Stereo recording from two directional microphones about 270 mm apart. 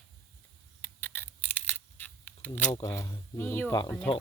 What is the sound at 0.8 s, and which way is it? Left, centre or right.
Camera, centre.